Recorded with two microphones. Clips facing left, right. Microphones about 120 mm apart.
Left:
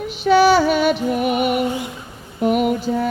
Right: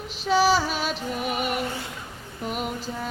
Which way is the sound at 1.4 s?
15° left (ahead or behind).